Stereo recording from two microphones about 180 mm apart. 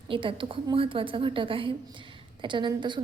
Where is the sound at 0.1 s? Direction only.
30° right (ahead or behind).